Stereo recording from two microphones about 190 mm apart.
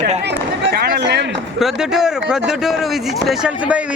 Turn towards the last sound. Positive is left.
turn(degrees=-5)  # may be behind; listen again after turning